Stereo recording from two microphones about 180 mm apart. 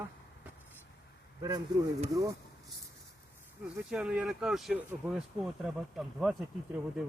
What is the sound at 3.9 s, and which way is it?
Speech, 5° right (ahead or behind).